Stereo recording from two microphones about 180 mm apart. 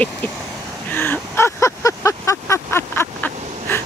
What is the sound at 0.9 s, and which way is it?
Vehicle, 10° left (ahead or behind).